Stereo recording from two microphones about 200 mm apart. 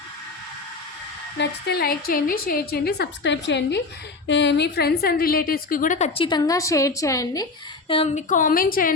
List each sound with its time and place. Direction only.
1.4 s a woman's voice: 55° left (ahead or behind); by 7.4 s 15° left (ahead or behind)
7.9 s a woman's voice: 30° left (ahead or behind); by 8.9 s 45° left (ahead or behind)